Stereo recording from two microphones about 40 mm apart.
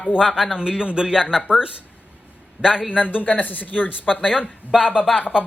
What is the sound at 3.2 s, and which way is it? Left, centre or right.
Speech, left.